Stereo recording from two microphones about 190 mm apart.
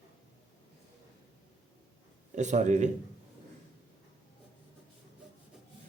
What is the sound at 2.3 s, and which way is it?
Speech, 40° right (ahead or behind).